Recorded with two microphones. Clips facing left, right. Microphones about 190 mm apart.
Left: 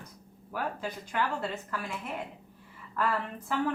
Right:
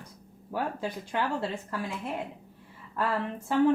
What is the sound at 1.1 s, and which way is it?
Speech, 30° right (ahead or behind).